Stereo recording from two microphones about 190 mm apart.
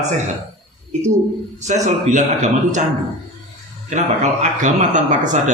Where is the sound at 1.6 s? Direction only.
40° right (ahead or behind).